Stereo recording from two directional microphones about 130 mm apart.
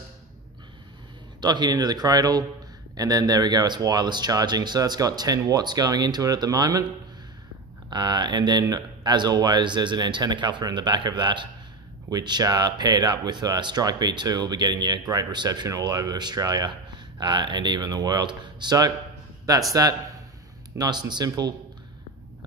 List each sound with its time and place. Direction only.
1.4 s speech: 35° right (ahead or behind)
7.9 s a man's voice: 35° right (ahead or behind)